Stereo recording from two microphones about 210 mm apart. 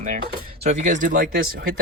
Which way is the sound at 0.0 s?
35° right (ahead or behind).